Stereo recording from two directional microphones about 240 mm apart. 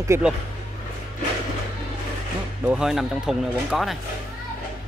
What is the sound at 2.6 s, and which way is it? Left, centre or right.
Speech, centre.